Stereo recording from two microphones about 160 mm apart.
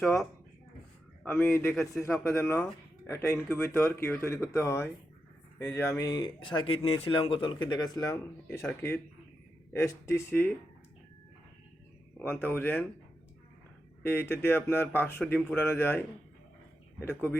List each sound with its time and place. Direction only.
1.2 s speech: 10° left (ahead or behind)
9.7 s speech: 20° left (ahead or behind)
12.2 s speech: 15° left (ahead or behind)
14.0 s speech: 15° left (ahead or behind)